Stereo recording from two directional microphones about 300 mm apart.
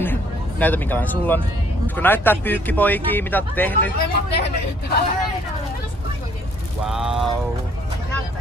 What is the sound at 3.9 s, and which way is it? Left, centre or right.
Speech, left.